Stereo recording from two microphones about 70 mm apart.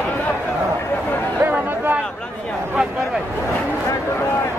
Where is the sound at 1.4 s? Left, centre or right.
Right.